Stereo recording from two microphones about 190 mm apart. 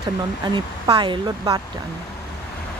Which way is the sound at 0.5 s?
25° right (ahead or behind).